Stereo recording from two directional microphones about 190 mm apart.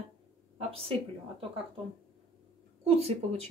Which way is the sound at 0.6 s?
30° right (ahead or behind).